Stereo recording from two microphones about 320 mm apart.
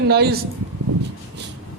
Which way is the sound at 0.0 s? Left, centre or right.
Right.